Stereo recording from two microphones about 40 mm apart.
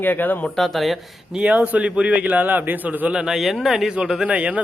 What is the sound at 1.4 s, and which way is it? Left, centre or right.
A man's voice, right.